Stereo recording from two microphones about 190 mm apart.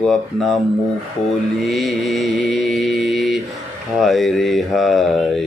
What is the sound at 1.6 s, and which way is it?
Mantra, centre (ahead or behind).